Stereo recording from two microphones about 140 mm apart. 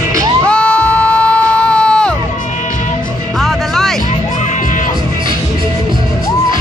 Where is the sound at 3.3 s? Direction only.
Centre (ahead or behind).